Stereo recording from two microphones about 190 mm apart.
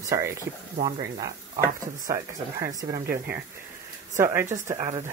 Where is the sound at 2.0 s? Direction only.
20° right (ahead or behind).